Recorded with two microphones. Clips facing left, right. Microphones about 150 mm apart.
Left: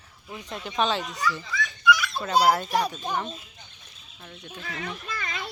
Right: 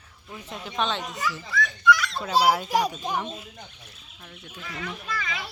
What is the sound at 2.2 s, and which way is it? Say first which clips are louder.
Speech: left 3 dB; 5° right (ahead or behind).